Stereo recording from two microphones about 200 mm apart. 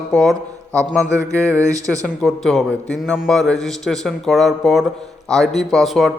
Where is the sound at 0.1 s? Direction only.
Centre (ahead or behind).